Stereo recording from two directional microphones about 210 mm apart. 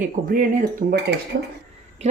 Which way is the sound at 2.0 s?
30° right (ahead or behind).